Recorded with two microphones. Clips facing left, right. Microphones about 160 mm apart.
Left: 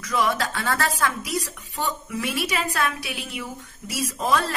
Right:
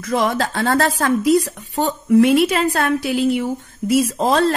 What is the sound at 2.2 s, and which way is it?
Speech, 65° right (ahead or behind).